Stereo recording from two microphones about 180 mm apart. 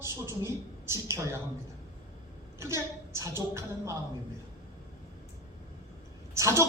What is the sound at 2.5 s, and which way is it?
A woman's voice, 15° right (ahead or behind).